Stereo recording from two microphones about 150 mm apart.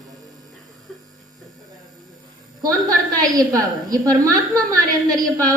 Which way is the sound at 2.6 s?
25° right (ahead or behind).